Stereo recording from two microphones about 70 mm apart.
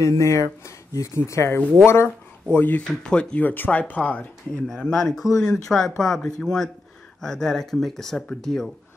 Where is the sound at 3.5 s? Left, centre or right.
Left.